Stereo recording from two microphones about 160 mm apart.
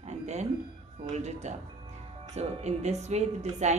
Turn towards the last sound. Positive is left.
turn(degrees=-45)  # may be behind; listen again after turning